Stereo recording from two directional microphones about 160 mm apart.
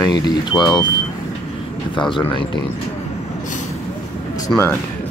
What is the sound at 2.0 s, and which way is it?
Speech, 30° left (ahead or behind).